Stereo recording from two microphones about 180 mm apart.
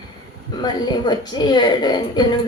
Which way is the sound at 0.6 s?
25° left (ahead or behind).